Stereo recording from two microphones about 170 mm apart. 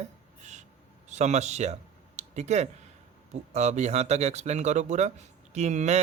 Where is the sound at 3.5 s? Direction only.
40° right (ahead or behind).